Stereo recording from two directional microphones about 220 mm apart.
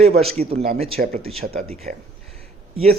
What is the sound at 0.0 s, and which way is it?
Speech, 25° right (ahead or behind).